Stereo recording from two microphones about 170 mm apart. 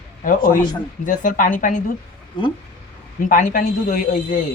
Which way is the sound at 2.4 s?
30° left (ahead or behind).